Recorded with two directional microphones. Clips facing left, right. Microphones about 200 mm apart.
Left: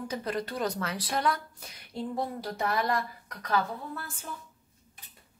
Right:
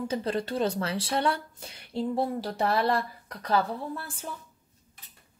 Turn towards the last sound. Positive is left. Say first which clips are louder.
# right 4 dB
turn(degrees=-30)  # may be behind; listen again after turning